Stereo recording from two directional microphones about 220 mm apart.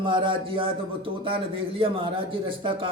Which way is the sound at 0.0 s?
20° right (ahead or behind).